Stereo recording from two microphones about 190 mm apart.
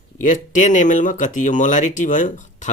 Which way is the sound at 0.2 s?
40° left (ahead or behind).